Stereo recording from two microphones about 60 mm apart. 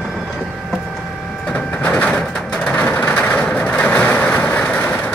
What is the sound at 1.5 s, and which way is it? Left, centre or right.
Printer, left.